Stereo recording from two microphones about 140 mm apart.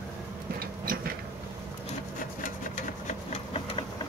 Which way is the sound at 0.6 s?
90° right.